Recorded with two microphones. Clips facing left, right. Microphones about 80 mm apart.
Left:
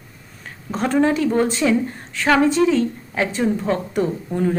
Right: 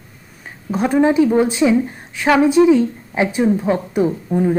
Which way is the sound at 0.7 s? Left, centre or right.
Centre.